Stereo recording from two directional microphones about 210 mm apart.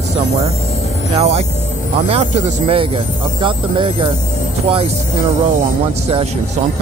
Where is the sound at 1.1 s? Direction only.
30° right (ahead or behind).